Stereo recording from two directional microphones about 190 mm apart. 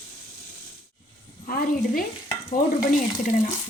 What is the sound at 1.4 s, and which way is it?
Speech, 50° left (ahead or behind).